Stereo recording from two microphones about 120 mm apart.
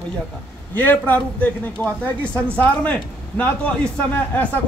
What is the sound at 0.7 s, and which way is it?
A man's voice, 15° left (ahead or behind).